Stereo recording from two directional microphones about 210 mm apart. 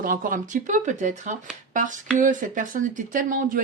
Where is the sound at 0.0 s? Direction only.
40° right (ahead or behind).